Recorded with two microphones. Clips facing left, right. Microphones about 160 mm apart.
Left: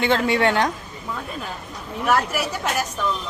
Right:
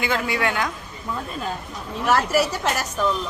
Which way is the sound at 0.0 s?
30° left (ahead or behind).